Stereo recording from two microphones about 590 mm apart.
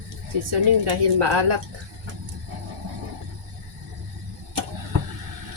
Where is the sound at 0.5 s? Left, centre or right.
Right.